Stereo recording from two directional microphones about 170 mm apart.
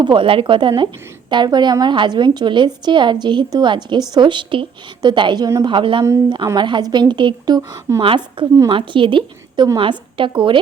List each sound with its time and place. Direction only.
0.0 s a woman's voice: 30° right (ahead or behind)